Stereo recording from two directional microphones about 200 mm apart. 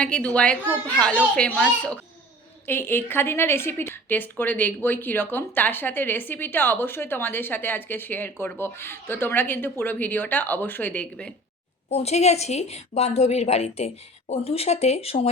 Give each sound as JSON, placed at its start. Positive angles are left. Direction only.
{"t": 0.0, "sound": "a woman's voice", "side_deg": 5}
{"t": 11.9, "sound": "a woman's voice", "side_deg": 30}